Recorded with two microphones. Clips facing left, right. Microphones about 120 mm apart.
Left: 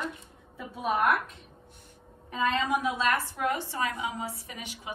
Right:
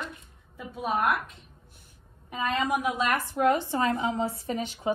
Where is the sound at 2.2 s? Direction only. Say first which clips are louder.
Even; 15° right (ahead or behind).